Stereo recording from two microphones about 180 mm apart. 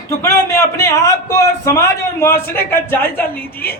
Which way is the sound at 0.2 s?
15° left (ahead or behind).